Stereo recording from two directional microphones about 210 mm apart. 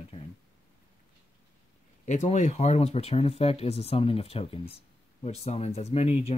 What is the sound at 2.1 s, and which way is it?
Speech, 35° left (ahead or behind).